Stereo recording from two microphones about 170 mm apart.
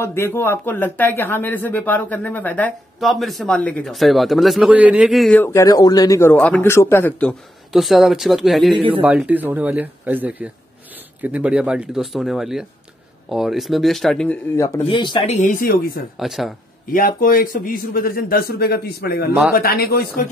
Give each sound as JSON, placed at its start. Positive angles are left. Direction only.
{"t": 0.0, "sound": "speech", "side_deg": 15}
{"t": 5.4, "sound": "speech", "side_deg": 20}
{"t": 6.3, "sound": "speech", "side_deg": 10}
{"t": 14.9, "sound": "speech", "side_deg": 25}
{"t": 15.3, "sound": "speech", "side_deg": 55}
{"t": 16.2, "sound": "speech", "side_deg": 0}
{"t": 16.9, "sound": "speech", "side_deg": 55}